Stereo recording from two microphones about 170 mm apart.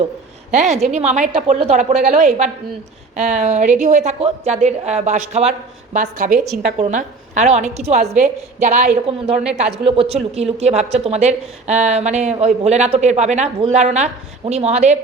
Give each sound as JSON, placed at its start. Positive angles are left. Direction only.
{"t": 0.5, "sound": "a woman's voice", "side_deg": -45}